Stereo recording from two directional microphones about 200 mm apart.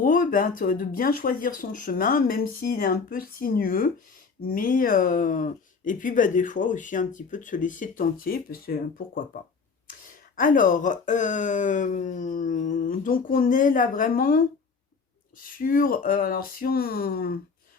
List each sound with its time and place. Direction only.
0.0 s speech: 45° left (ahead or behind)
15.6 s speech: 45° left (ahead or behind)